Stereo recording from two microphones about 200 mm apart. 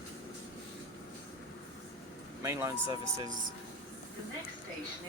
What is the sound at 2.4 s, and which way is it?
Speech, 15° right (ahead or behind).